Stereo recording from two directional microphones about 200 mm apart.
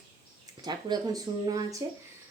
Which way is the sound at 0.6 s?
20° right (ahead or behind).